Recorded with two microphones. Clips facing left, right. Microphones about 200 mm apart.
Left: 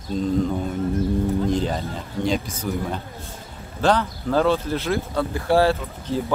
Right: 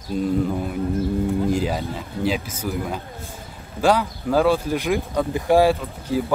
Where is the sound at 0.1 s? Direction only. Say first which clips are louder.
Even; 10° right (ahead or behind).